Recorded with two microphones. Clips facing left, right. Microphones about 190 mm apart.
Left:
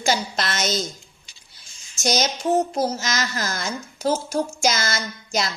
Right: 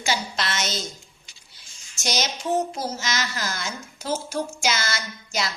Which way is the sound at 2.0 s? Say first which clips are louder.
Left 5 dB; 45° left (ahead or behind).